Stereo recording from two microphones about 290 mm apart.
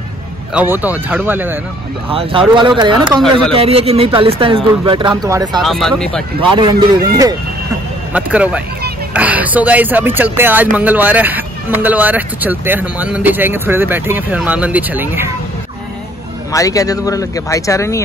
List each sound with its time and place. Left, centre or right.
0.6 s speech: centre
2.0 s speech: centre
5.6 s speech: centre
6.5 s speech: centre
16.5 s speech: centre